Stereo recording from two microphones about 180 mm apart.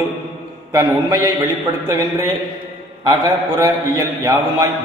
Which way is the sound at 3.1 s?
20° right (ahead or behind).